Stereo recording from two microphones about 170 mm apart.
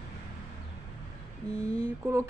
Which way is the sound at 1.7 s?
15° right (ahead or behind).